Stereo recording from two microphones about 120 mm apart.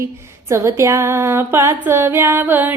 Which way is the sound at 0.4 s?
25° right (ahead or behind).